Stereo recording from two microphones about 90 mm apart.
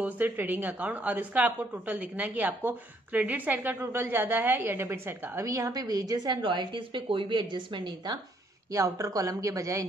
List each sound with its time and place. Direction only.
0.0 s a woman's voice: 20° right (ahead or behind)
5.4 s a woman's voice: 35° right (ahead or behind)
6.4 s speech: 65° right (ahead or behind)
8.7 s speech: 35° right (ahead or behind)